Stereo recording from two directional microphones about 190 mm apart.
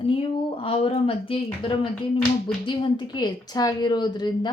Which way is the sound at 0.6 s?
30° left (ahead or behind).